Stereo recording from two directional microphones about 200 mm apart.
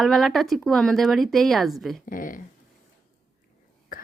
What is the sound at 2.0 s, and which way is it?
Speech, 45° left (ahead or behind).